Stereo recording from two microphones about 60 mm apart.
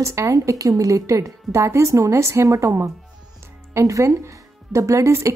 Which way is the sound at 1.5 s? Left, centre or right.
Right.